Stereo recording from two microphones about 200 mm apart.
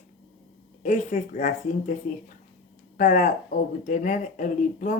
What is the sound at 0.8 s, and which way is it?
Speech, 35° left (ahead or behind).